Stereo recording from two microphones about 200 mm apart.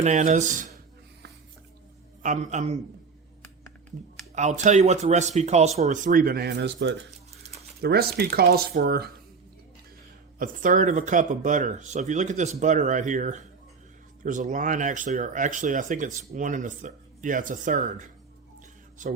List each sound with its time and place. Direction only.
0.0 s speech: 35° right (ahead or behind)
2.2 s speech: 35° right (ahead or behind)
4.4 s speech: 35° right (ahead or behind); by 9.1 s 50° right (ahead or behind)
10.3 s speech: 40° right (ahead or behind)